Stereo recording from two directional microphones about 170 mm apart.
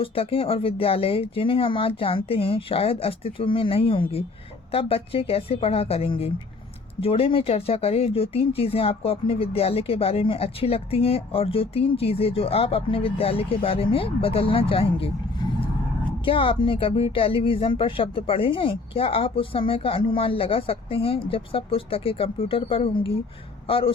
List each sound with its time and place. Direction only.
0.0 s speech: 35° left (ahead or behind)
16.2 s a man's voice: 30° left (ahead or behind)